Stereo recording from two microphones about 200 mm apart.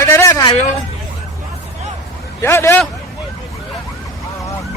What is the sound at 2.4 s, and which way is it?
Speech, 10° left (ahead or behind).